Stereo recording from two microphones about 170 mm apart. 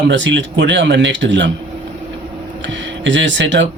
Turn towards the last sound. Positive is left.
turn(degrees=-90)